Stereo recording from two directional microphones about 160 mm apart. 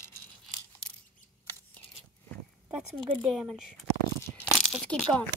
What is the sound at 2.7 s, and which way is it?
Speech, centre (ahead or behind).